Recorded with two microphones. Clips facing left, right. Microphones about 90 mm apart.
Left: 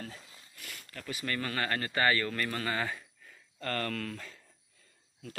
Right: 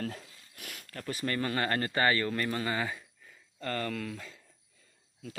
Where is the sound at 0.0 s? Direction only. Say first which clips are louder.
Right 7 dB; 55° right (ahead or behind).